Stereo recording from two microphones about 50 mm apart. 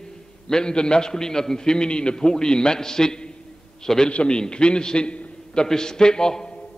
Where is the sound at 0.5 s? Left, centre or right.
Centre.